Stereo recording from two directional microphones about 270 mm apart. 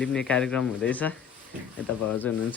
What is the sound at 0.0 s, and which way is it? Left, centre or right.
Speech, centre.